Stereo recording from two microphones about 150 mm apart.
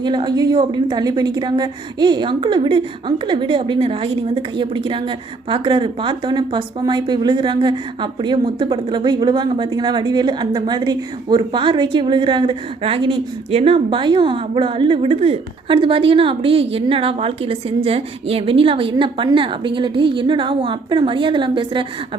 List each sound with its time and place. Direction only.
0.0 s a woman's voice: 30° right (ahead or behind)